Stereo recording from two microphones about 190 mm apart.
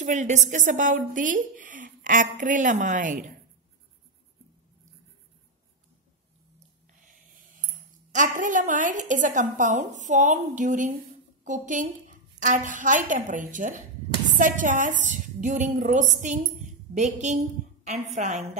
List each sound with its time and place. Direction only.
0.0 s a woman's voice: 40° right (ahead or behind)
7.1 s a woman's voice: 45° right (ahead or behind)